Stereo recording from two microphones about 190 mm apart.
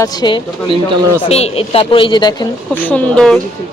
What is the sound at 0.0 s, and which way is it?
Speech, 20° left (ahead or behind).